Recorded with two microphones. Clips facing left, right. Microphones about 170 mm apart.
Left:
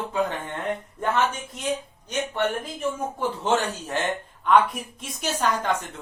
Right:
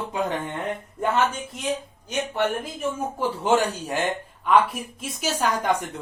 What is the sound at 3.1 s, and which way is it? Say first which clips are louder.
A woman's voice: right 4 dB; 10° right (ahead or behind).